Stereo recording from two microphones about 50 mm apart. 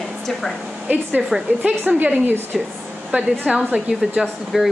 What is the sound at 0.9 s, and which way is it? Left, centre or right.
A woman's voice, right.